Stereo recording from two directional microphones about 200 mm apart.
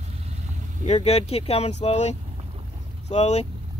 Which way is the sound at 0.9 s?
30° left (ahead or behind).